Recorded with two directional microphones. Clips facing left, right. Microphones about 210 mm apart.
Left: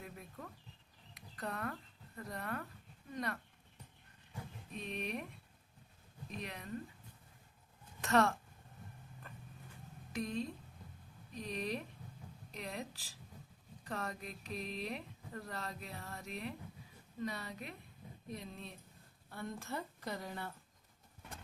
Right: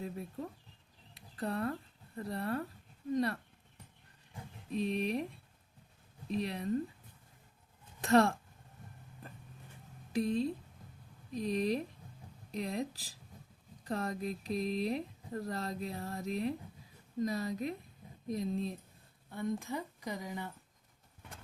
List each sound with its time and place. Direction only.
0.0 s speech: 30° right (ahead or behind)
1.1 s a sound: 30° right (ahead or behind)
2.1 s speech: 30° right (ahead or behind)
4.7 s speech: 35° right (ahead or behind)
8.0 s speech: 35° right (ahead or behind)
10.1 s speech: 35° right (ahead or behind)
19.3 s speech: 15° right (ahead or behind)